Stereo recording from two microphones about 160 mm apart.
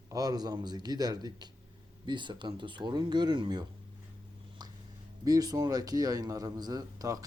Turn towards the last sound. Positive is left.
turn(degrees=-20)  # may be behind; listen again after turning